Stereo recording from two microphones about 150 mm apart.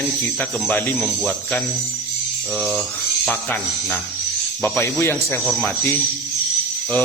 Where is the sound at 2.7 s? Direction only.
Centre (ahead or behind); by 5.4 s 15° left (ahead or behind).